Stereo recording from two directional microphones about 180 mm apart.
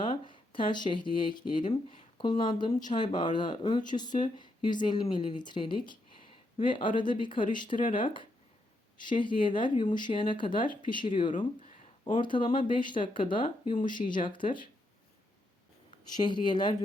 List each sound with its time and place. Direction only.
0.0 s speech: 25° left (ahead or behind)
7.8 s speech: 50° left (ahead or behind)
9.1 s speech: 25° left (ahead or behind)
11.3 s a sound: 45° left (ahead or behind)
12.2 s speech: 25° left (ahead or behind)
13.9 s speech: 45° left (ahead or behind)
14.3 s speech: 25° left (ahead or behind)
15.9 s speech: 25° left (ahead or behind)